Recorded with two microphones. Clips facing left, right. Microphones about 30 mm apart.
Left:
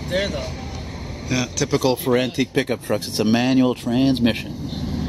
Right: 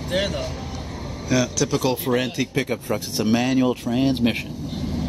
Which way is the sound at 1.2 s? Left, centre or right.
Centre.